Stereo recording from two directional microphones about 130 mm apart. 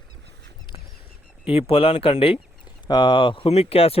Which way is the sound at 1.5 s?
50° left (ahead or behind).